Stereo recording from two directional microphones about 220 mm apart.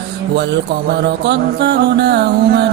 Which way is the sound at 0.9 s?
50° right (ahead or behind).